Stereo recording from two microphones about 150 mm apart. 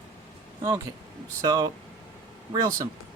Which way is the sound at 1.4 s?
25° right (ahead or behind).